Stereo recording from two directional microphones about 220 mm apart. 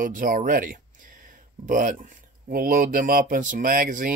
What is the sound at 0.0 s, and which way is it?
Speech, 40° right (ahead or behind).